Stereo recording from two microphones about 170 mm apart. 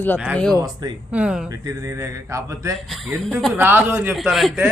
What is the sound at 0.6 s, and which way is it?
Speech, 25° right (ahead or behind).